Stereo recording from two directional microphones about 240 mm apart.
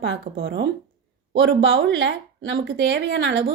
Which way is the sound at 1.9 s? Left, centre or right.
Right.